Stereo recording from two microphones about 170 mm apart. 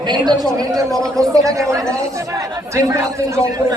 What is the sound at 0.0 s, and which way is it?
A man's voice, 25° right (ahead or behind).